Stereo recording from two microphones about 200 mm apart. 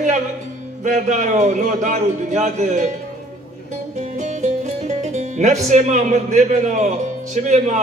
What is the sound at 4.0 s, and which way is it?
Speech, 35° right (ahead or behind).